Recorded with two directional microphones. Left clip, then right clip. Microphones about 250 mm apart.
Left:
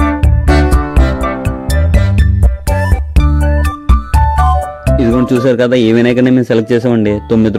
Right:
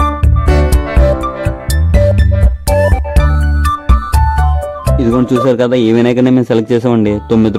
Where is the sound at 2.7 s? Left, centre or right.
Centre.